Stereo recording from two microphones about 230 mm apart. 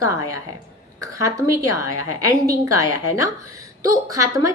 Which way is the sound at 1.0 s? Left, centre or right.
Centre.